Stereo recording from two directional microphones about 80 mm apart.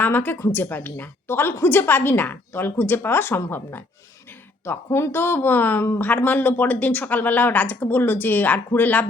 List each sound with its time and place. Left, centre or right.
0.0 s speech: left